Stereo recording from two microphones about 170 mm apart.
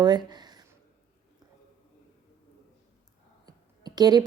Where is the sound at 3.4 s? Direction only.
25° right (ahead or behind).